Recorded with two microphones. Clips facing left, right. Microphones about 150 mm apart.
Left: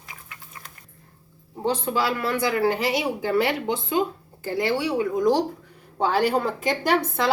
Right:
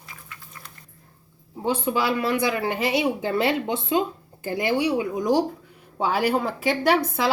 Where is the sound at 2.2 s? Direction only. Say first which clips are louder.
Left 1 dB; 20° right (ahead or behind).